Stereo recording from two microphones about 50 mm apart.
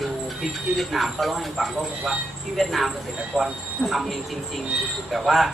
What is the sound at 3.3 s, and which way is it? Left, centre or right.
Speech, centre.